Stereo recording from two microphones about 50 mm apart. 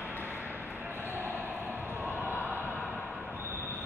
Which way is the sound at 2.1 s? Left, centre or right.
Right.